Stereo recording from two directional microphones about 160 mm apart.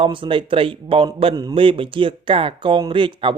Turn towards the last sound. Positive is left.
turn(degrees=-30)  # may be behind; listen again after turning